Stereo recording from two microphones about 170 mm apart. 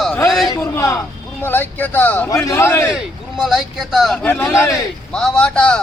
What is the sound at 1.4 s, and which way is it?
Speech, 10° left (ahead or behind).